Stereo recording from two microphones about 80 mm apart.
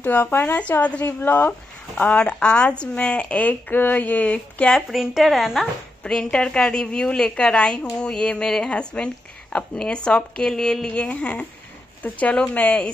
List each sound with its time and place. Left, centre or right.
0.0 s a woman's voice: left
2.0 s a woman's voice: centre
4.7 s speech: centre
6.0 s a woman's voice: centre